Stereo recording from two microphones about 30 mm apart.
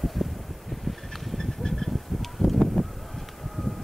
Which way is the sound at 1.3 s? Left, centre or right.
Centre.